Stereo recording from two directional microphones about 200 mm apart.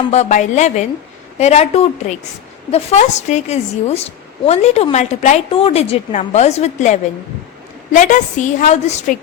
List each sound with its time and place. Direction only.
0.1 s a woman's voice: 35° left (ahead or behind)